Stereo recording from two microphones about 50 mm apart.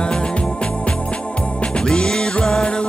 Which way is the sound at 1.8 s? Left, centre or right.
Centre.